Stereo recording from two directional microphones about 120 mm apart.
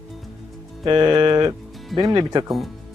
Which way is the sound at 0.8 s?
40° right (ahead or behind).